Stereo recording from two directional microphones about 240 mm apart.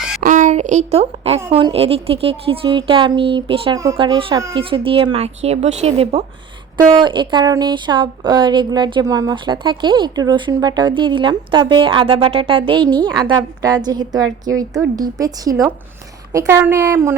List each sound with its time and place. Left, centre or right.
0.2 s a woman's voice: right; by 17.2 s centre